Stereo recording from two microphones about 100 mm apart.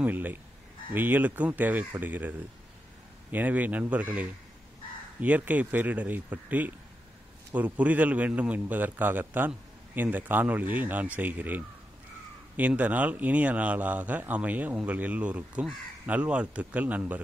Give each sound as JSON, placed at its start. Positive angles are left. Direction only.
{"t": 0.0, "sound": "speech", "side_deg": -20}